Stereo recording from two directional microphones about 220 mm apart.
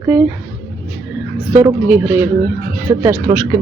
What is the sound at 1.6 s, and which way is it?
Speech, 5° right (ahead or behind).